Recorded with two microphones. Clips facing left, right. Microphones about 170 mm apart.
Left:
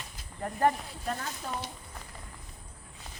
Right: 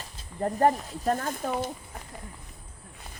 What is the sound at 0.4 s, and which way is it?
Speech, 35° right (ahead or behind).